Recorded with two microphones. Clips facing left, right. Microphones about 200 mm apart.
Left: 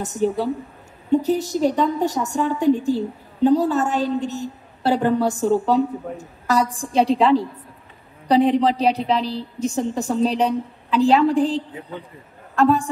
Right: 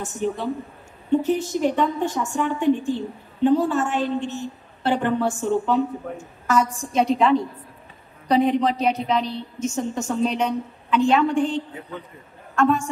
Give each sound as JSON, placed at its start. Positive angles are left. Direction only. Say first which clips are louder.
{"t": 0.0, "sound": "a woman's voice", "louder": "left 4 dB", "side_deg": 40}